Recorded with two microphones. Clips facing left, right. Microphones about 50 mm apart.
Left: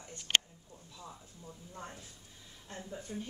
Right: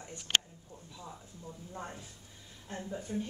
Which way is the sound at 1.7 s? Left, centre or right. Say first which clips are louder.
Right 3 dB; centre.